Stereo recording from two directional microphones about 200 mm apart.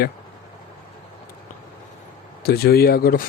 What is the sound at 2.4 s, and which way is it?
Speech, 50° left (ahead or behind).